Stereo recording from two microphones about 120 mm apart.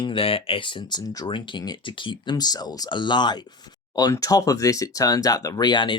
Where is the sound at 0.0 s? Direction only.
50° left (ahead or behind).